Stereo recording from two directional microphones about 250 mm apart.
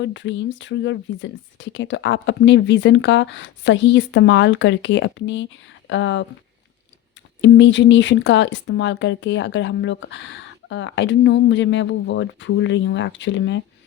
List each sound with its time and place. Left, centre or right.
0.0 s speech: left
7.4 s speech: left